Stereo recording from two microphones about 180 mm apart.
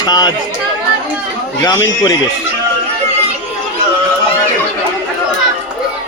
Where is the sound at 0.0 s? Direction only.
20° left (ahead or behind).